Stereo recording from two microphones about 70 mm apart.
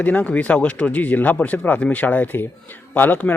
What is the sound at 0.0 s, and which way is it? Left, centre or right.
Speech, left.